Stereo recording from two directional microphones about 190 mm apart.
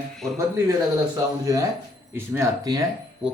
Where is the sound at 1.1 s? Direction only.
20° right (ahead or behind).